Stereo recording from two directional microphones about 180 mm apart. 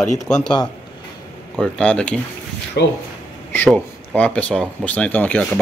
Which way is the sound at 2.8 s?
65° left (ahead or behind).